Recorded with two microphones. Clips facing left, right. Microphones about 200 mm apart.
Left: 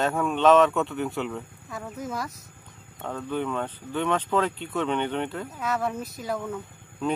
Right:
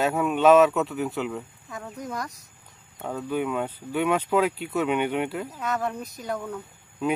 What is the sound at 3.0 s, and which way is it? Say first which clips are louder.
Speech: right 2 dB; 10° right (ahead or behind).